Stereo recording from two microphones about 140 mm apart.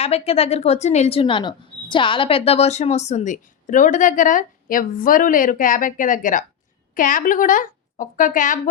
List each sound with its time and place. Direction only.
0.0 s a woman's voice: 45° left (ahead or behind); by 8.7 s 70° left (ahead or behind)